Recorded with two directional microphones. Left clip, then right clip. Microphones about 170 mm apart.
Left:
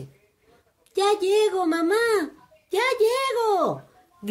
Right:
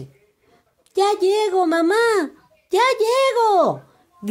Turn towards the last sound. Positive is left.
turn(degrees=-35)  # may be behind; listen again after turning